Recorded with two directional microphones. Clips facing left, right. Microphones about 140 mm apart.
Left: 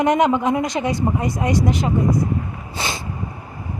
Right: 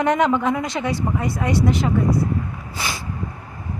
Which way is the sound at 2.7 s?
25° left (ahead or behind).